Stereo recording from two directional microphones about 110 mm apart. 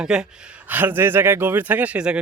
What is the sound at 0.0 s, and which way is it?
Speech, 5° right (ahead or behind).